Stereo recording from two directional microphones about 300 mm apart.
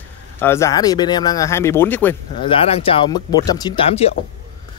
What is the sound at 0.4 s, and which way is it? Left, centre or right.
Speech, centre.